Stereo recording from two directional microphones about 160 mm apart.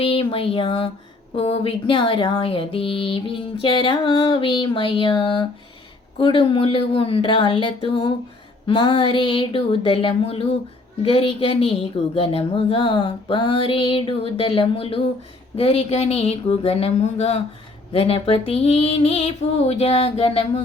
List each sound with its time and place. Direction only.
0.0 s speech: 35° left (ahead or behind)